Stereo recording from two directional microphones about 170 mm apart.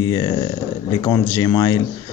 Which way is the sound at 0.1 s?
25° left (ahead or behind).